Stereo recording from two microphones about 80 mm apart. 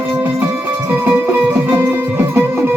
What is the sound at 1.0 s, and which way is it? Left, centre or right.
Music, right.